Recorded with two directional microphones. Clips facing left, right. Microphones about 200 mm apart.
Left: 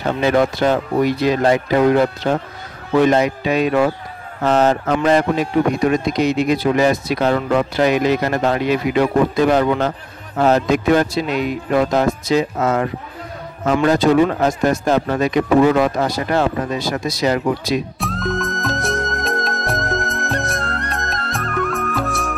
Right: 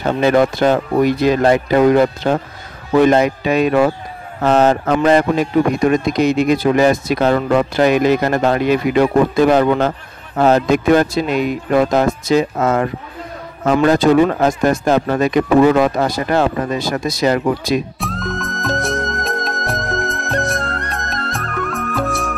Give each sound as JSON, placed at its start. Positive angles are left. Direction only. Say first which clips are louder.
{"t": 0.2, "sound": "a man's voice", "louder": "right 3 dB", "side_deg": -50}
{"t": 17.9, "sound": "music", "louder": "left 2 dB", "side_deg": 0}